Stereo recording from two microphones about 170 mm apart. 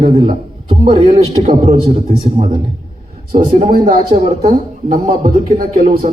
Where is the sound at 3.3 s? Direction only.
55° right (ahead or behind).